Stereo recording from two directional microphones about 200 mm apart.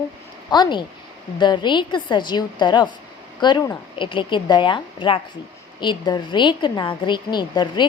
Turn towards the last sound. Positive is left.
turn(degrees=20)  # may be behind; listen again after turning